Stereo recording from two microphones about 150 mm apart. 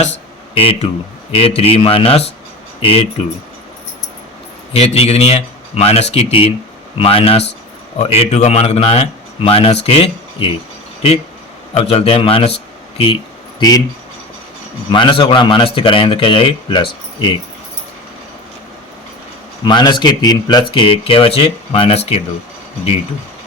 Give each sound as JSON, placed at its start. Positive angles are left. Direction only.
{"t": 0.5, "sound": "speech", "side_deg": 40}
{"t": 4.7, "sound": "speech", "side_deg": 45}
{"t": 11.7, "sound": "speech", "side_deg": 45}
{"t": 13.6, "sound": "speech", "side_deg": 25}
{"t": 14.8, "sound": "speech", "side_deg": 30}
{"t": 19.6, "sound": "speech", "side_deg": 30}